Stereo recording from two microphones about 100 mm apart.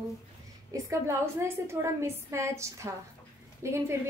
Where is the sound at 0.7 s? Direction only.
30° right (ahead or behind).